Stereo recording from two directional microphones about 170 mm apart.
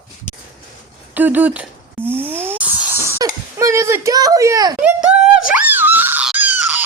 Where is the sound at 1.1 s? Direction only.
10° right (ahead or behind).